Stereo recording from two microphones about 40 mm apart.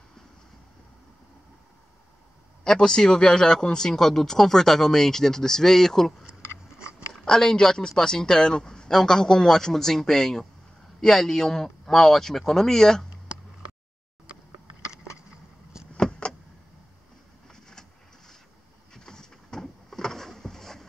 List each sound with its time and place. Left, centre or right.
2.6 s speech: centre
7.2 s speech: centre
16.0 s vehicle: left
17.5 s vehicle: centre
18.9 s a sound: centre